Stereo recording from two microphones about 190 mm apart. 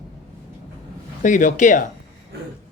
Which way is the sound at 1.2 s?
40° left (ahead or behind).